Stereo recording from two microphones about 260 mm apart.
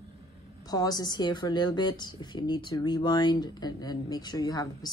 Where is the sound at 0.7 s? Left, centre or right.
Centre.